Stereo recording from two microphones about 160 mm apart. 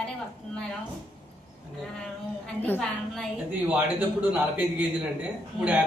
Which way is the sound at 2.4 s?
10° left (ahead or behind).